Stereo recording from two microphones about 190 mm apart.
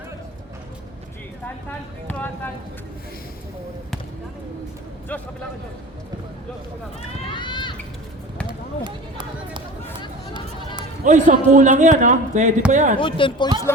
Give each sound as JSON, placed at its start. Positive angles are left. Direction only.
{"t": 2.0, "sound": "speech", "side_deg": 10}
{"t": 7.3, "sound": "run", "side_deg": 25}
{"t": 8.4, "sound": "basketball bounce", "side_deg": -25}
{"t": 11.0, "sound": "a man's voice", "side_deg": -40}
{"t": 13.0, "sound": "speech", "side_deg": 25}